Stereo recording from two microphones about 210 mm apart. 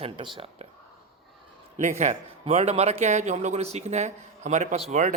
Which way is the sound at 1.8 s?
35° right (ahead or behind).